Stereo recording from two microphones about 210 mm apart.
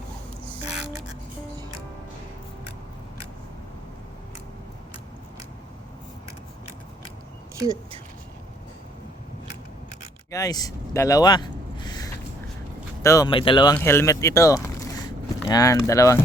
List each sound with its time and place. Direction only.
10.3 s a sound: 15° left (ahead or behind)
13.0 s speech: 15° left (ahead or behind)
13.7 s speech: 10° left (ahead or behind)